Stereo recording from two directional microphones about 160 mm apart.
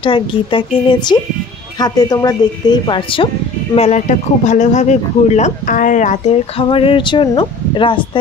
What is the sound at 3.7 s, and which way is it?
Speech, 45° left (ahead or behind).